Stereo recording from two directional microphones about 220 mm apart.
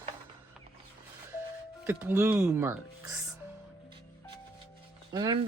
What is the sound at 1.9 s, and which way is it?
Speech, 10° right (ahead or behind).